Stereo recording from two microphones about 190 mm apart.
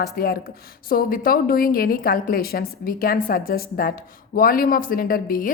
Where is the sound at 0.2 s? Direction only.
50° left (ahead or behind).